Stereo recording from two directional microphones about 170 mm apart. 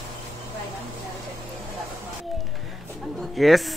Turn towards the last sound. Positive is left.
turn(degrees=0)  # may be behind; listen again after turning